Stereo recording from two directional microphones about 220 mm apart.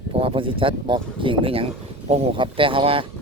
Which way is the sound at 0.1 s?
25° right (ahead or behind).